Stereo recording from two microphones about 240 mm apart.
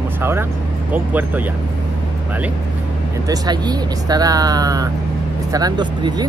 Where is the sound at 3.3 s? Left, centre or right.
Centre.